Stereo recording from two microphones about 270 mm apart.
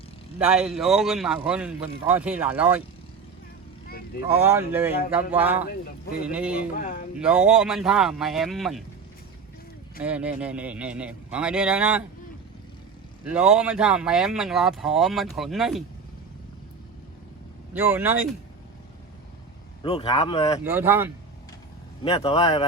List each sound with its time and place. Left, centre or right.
0.3 s speech: centre
4.2 s speech: centre
5.6 s speech: left
6.2 s speech: centre
6.7 s speech: left
7.2 s speech: centre
10.0 s speech: centre
13.2 s speech: centre
17.7 s speech: centre
19.8 s speech: left
20.7 s speech: centre
22.0 s speech: left